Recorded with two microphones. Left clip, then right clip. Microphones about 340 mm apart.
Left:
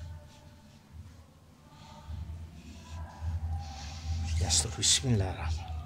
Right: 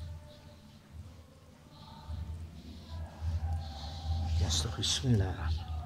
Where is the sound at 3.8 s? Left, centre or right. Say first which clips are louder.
Right 1 dB; centre.